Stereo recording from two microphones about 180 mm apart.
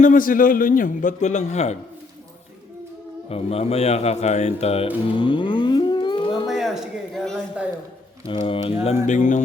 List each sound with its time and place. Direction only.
0.0 s a man's voice: 50° left (ahead or behind)
3.2 s a man's voice: 35° left (ahead or behind)
5.1 s moo: 30° left (ahead or behind)
6.5 s a sound: centre (ahead or behind)
8.3 s a man's voice: 30° left (ahead or behind); by 9.4 s 45° left (ahead or behind)